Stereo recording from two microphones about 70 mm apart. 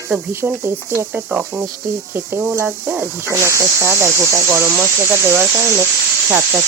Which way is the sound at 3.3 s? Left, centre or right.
Right.